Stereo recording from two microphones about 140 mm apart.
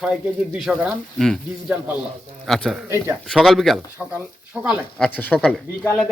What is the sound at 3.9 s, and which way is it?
Speech, 10° right (ahead or behind).